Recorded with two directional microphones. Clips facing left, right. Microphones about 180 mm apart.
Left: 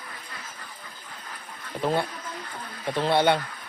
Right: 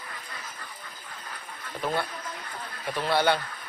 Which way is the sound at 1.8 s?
25° left (ahead or behind).